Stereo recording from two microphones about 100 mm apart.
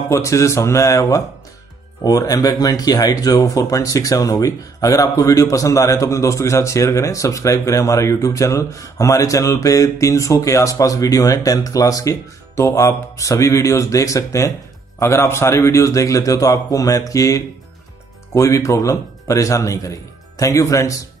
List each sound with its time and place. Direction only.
0.1 s a man's voice: 30° left (ahead or behind)